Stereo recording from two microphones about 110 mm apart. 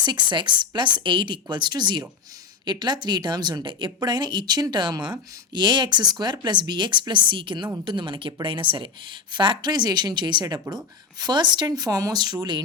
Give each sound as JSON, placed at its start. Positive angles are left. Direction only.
{"t": 0.0, "sound": "speech", "side_deg": -45}